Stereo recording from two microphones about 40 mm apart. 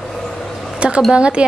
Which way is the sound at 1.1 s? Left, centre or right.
Right.